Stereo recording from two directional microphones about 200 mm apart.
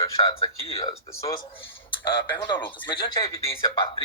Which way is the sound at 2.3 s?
25° left (ahead or behind).